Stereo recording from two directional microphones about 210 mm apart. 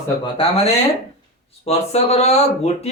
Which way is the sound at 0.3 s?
30° left (ahead or behind).